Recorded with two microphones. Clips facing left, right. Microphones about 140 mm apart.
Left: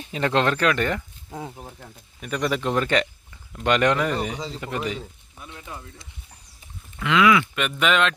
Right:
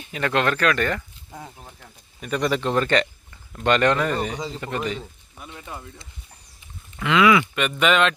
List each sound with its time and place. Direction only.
0.0 s speech: 25° left (ahead or behind)
1.8 s speech: 5° left (ahead or behind)
4.4 s speech: 5° right (ahead or behind)
4.6 s speech: 5° left (ahead or behind)
5.4 s speech: 10° right (ahead or behind)